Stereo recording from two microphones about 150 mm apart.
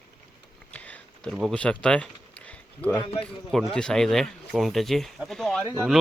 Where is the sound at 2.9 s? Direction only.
35° left (ahead or behind).